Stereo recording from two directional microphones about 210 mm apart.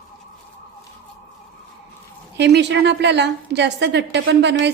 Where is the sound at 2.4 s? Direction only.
55° right (ahead or behind).